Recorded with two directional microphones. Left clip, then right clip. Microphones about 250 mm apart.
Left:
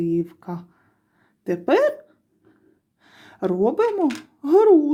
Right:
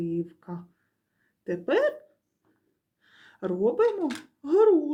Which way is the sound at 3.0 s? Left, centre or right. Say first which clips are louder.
Left 7 dB; left.